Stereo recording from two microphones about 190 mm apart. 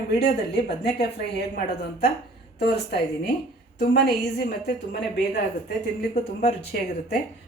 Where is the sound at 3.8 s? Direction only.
55° left (ahead or behind).